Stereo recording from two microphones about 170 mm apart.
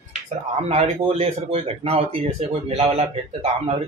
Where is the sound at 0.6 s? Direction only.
40° right (ahead or behind).